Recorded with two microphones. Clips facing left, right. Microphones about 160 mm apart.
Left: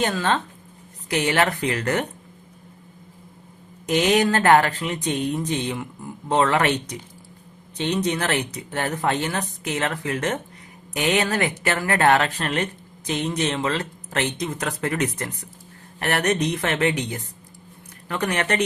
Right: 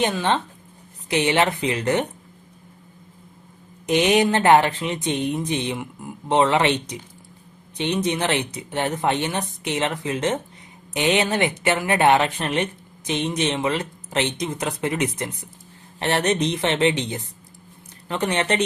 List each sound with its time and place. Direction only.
0.0 s speech: 20° right (ahead or behind)
3.8 s speech: 20° right (ahead or behind)